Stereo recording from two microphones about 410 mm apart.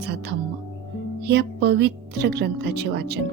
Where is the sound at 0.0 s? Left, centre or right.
Right.